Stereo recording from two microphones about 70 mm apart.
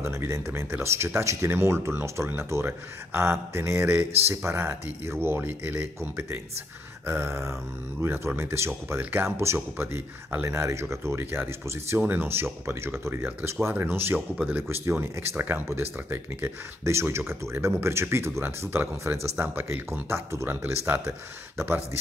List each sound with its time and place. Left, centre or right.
0.0 s speech: right
20.4 s speech: right